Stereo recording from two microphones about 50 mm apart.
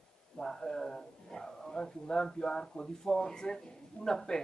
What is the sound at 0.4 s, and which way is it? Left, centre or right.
A man's voice, centre.